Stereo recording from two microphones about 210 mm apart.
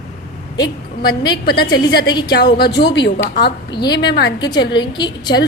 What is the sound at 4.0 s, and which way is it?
Speech, 55° left (ahead or behind).